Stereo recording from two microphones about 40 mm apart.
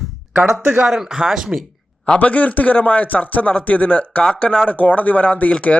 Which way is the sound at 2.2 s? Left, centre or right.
Left.